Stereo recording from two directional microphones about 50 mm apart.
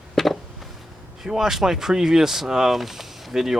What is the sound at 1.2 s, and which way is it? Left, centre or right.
Speech, centre.